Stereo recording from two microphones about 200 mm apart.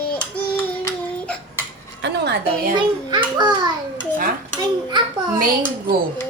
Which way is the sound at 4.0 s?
40° right (ahead or behind).